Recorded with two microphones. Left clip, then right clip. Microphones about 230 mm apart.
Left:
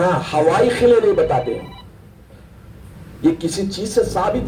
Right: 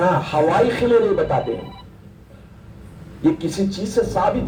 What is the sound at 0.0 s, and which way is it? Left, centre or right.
Speech, left.